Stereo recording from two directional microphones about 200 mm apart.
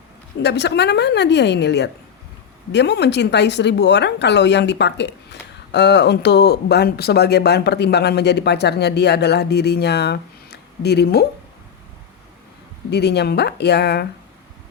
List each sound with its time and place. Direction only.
0.4 s a woman's voice: 60° left (ahead or behind)
12.9 s a woman's voice: 55° left (ahead or behind)